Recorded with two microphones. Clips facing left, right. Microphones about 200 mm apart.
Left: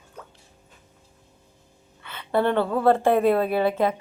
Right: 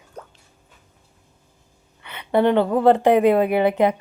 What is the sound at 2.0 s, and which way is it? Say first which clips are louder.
A woman's voice: right 4 dB; 20° right (ahead or behind).